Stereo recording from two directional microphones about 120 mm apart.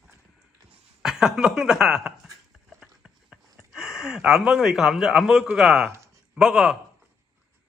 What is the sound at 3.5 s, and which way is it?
Speech, 5° right (ahead or behind).